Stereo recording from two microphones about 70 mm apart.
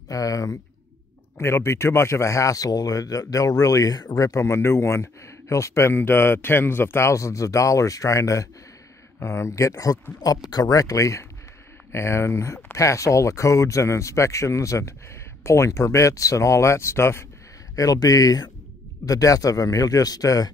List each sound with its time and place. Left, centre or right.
0.1 s speech: left
1.4 s speech: left
4.2 s speech: left
10.2 s speech: left
17.7 s speech: left